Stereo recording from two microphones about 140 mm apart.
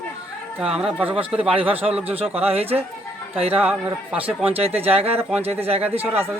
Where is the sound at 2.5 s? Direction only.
45° right (ahead or behind).